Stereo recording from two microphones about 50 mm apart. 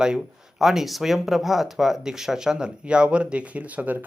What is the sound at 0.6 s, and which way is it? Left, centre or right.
Speech, centre.